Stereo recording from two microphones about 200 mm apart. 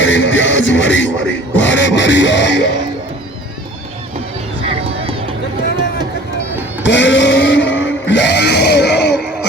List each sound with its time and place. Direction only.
0.0 s music: 70° left (ahead or behind)
1.6 s beatboxing: 65° left (ahead or behind)
4.6 s vehicle: 30° right (ahead or behind)
6.8 s music: 60° left (ahead or behind)